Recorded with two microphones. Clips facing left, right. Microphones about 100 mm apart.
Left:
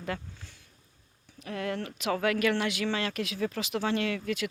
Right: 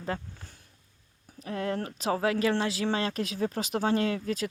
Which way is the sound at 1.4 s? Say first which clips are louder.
Right 2 dB; 35° right (ahead or behind).